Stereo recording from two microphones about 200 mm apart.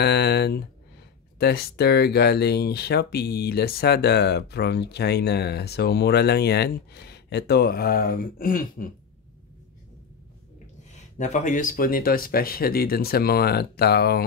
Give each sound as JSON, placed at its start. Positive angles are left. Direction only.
{"t": 0.0, "sound": "a sound", "side_deg": 55}
{"t": 1.4, "sound": "speech", "side_deg": 50}
{"t": 11.1, "sound": "speech", "side_deg": 35}